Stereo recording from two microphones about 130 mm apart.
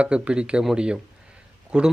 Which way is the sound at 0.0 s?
10° right (ahead or behind).